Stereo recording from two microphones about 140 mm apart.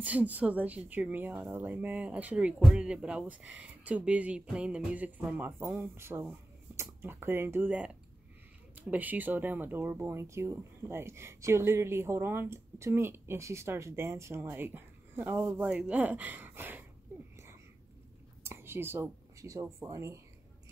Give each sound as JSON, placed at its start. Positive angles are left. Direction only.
{"t": 0.0, "sound": "speech", "side_deg": -10}
{"t": 18.4, "sound": "speech", "side_deg": -15}